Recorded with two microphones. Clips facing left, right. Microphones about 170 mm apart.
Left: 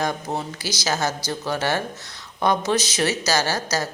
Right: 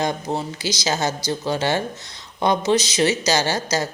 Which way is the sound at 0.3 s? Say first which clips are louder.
Right 3 dB; 10° left (ahead or behind).